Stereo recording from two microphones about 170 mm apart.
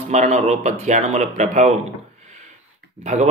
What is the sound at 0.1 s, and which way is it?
Speech, 40° right (ahead or behind).